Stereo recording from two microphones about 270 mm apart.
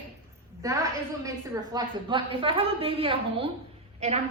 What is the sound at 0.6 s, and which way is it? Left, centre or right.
A woman's voice, centre.